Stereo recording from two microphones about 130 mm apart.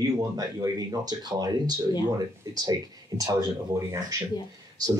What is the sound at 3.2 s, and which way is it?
Speech, 25° right (ahead or behind).